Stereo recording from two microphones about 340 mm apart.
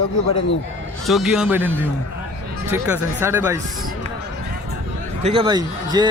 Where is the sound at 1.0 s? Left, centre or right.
Centre.